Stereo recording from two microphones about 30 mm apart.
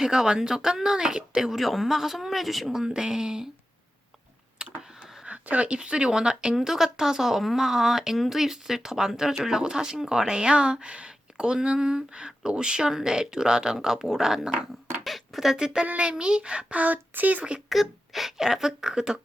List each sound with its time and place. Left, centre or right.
0.0 s speech: right
1.5 s speech: centre
2.8 s speech: right
4.6 s computer keyboard: right
5.3 s speech: right
6.6 s speech: centre
12.9 s speech: centre
13.7 s speech: centre
15.0 s a sound: centre
15.5 s speech: right
16.7 s speech: right
17.7 s speech: centre
18.3 s speech: centre